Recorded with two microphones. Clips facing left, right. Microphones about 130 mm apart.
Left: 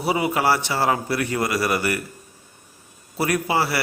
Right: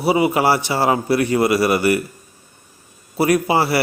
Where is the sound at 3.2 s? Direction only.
15° right (ahead or behind).